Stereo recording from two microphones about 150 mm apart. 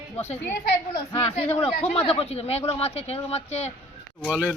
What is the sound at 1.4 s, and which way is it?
Speech, 40° left (ahead or behind).